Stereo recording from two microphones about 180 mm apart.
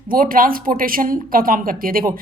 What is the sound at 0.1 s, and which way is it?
Speech, 50° right (ahead or behind).